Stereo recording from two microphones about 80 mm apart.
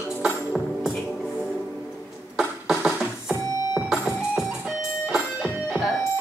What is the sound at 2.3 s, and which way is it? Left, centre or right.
Music, centre.